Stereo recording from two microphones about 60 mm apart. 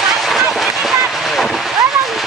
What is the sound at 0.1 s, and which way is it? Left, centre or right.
Boat, centre.